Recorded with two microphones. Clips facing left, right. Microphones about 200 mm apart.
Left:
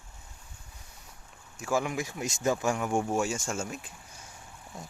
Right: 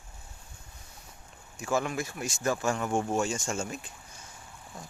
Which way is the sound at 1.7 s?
15° left (ahead or behind).